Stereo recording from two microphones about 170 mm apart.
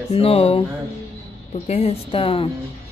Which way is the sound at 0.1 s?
35° left (ahead or behind).